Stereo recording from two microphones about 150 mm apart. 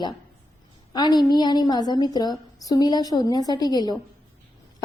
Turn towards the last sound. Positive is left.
turn(degrees=25)  # may be behind; listen again after turning